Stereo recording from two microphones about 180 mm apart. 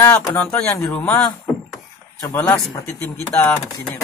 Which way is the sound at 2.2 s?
15° left (ahead or behind).